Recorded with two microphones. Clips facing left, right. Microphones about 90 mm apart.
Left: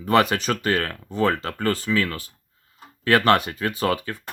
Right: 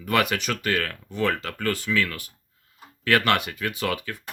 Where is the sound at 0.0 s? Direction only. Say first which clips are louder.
Left 4 dB; 35° left (ahead or behind).